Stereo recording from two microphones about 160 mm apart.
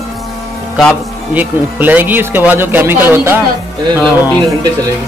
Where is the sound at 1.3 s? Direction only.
10° right (ahead or behind).